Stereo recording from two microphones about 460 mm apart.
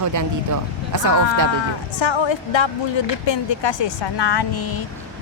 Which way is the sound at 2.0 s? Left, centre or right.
Left.